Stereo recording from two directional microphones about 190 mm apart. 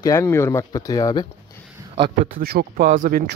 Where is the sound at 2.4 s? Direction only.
50° right (ahead or behind).